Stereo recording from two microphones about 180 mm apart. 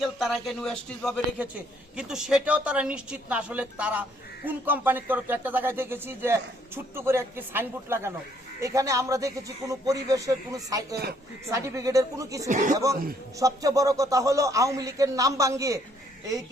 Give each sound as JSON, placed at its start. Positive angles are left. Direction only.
{"t": 0.0, "sound": "a woman's voice", "side_deg": 0}
{"t": 10.9, "sound": "speech", "side_deg": -60}
{"t": 11.5, "sound": "a woman's voice", "side_deg": -15}
{"t": 12.5, "sound": "speech", "side_deg": -45}
{"t": 12.7, "sound": "a woman's voice", "side_deg": -20}